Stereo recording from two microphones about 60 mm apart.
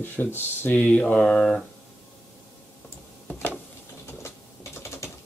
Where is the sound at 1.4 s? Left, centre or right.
Centre.